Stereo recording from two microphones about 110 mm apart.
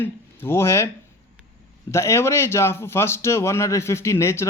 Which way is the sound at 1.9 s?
25° left (ahead or behind).